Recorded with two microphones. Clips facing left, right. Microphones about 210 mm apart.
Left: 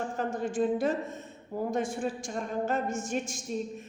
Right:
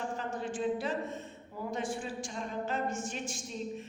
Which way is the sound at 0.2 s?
45° left (ahead or behind).